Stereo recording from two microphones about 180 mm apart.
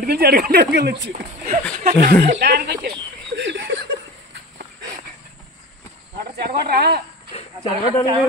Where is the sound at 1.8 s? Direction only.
40° right (ahead or behind).